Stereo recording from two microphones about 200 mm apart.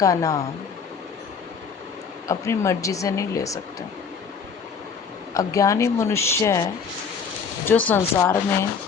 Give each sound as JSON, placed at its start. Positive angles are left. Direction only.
{"t": 0.0, "sound": "speech", "side_deg": 15}
{"t": 2.2, "sound": "speech", "side_deg": 15}
{"t": 5.3, "sound": "speech", "side_deg": 15}
{"t": 7.7, "sound": "speech", "side_deg": 10}